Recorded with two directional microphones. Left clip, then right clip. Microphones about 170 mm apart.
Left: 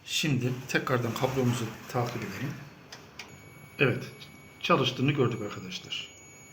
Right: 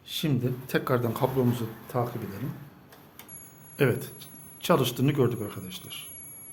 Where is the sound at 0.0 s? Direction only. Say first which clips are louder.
Left 1 dB; 90° right.